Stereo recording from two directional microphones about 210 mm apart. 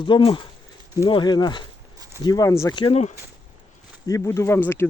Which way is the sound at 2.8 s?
30° left (ahead or behind).